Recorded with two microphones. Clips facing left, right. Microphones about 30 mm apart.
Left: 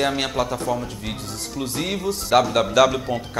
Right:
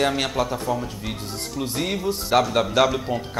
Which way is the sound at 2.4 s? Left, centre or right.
Left.